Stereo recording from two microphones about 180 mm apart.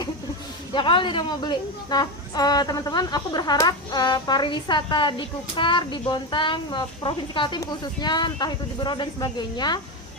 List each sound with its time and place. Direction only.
0.7 s a woman's voice: 25° left (ahead or behind)